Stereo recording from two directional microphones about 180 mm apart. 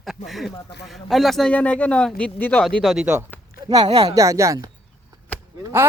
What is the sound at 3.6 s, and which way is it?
Speech, 25° right (ahead or behind).